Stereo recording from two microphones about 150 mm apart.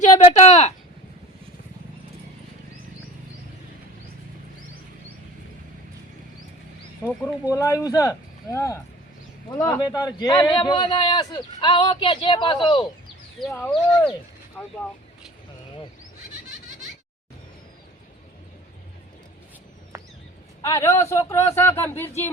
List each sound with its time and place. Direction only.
0.0 s a sound: 45° left (ahead or behind)
7.1 s speech: 5° left (ahead or behind)
7.5 s a man's voice: 20° left (ahead or behind)
13.5 s speech: 10° left (ahead or behind)
20.6 s speech: 20° left (ahead or behind)